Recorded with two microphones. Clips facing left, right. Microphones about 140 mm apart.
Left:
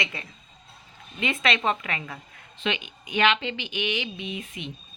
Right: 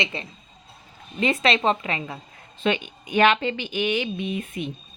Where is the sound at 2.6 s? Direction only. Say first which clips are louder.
Right 6 dB; 45° right (ahead or behind).